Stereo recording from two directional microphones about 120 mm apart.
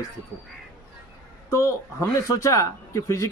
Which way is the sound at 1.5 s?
25° left (ahead or behind).